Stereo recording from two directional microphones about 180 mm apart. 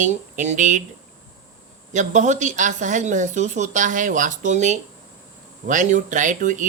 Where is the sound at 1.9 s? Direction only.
40° right (ahead or behind).